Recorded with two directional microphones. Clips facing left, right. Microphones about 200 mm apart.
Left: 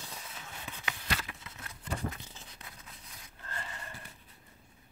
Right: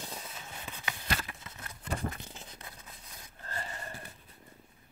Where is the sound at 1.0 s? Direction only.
45° right (ahead or behind).